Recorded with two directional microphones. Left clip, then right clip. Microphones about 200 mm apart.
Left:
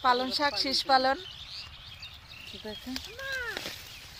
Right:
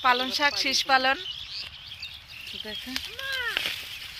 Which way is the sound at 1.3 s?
60° left (ahead or behind).